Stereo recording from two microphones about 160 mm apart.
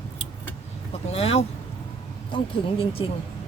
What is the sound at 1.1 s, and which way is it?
Speech, 40° left (ahead or behind).